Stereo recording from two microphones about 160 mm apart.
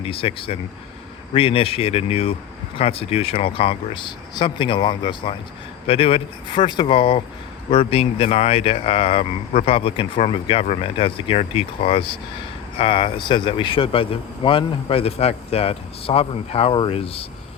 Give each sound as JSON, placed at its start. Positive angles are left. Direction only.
{"t": 0.0, "sound": "speech", "side_deg": 35}